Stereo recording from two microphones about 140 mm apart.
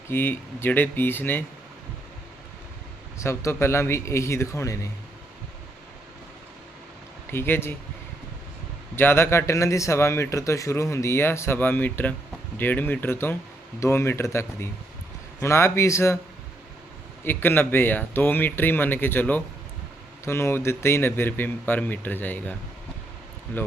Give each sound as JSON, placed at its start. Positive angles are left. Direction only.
{"t": 0.1, "sound": "speech", "side_deg": 15}
{"t": 3.2, "sound": "speech", "side_deg": 20}
{"t": 7.3, "sound": "speech", "side_deg": 15}
{"t": 9.0, "sound": "speech", "side_deg": 15}
{"t": 17.2, "sound": "speech", "side_deg": 15}